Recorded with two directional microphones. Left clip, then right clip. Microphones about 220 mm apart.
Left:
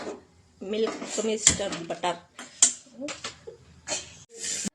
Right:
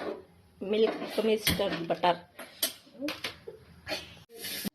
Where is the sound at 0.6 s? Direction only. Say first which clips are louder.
Right 1 dB; 5° right (ahead or behind).